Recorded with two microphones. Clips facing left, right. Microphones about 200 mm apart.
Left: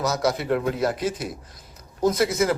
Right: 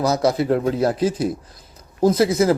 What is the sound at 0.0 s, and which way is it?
Speech, 30° right (ahead or behind).